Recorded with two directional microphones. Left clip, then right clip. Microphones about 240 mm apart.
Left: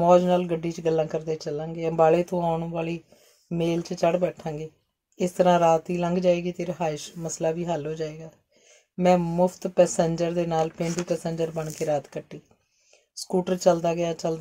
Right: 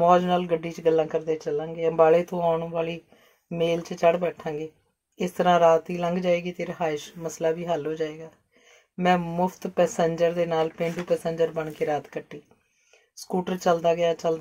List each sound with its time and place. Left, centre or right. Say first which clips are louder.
0.0 s speech: left 1 dB; left